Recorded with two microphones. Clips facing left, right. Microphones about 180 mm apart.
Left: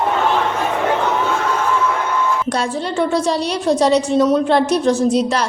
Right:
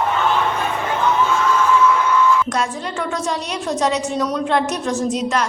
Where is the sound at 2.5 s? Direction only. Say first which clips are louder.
Left 3 dB; 30° left (ahead or behind).